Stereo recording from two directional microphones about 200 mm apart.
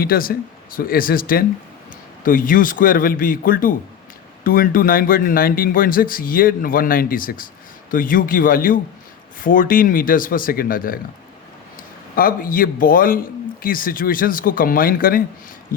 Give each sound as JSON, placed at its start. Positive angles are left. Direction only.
{"t": 0.0, "sound": "a man's voice", "side_deg": 45}
{"t": 12.1, "sound": "a man's voice", "side_deg": 45}